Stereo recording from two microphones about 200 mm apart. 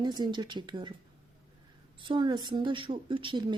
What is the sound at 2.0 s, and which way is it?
Speech, 25° right (ahead or behind).